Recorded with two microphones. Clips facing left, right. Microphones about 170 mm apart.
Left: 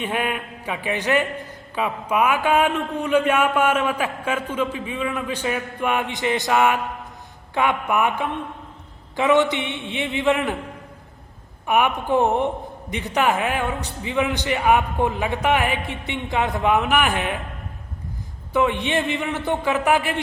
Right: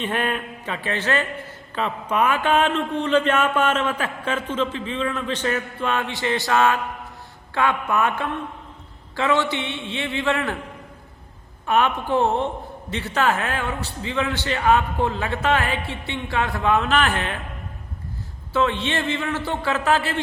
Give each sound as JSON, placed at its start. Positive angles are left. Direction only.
{"t": 0.0, "sound": "a man's voice", "side_deg": 10}
{"t": 11.6, "sound": "a man's voice", "side_deg": 15}
{"t": 18.5, "sound": "a man's voice", "side_deg": 15}